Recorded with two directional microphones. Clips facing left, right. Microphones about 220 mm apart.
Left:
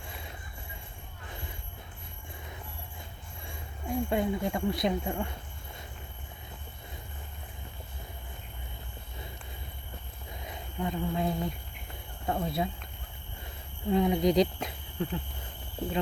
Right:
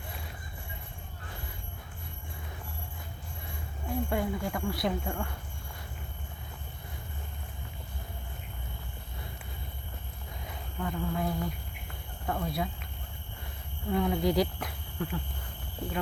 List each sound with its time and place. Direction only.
3.4 s speech: 20° left (ahead or behind)
10.4 s speech: 20° left (ahead or behind)
12.2 s a sound: 25° left (ahead or behind)
13.9 s speech: 20° left (ahead or behind)